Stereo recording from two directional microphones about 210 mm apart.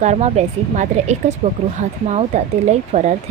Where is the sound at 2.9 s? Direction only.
35° right (ahead or behind).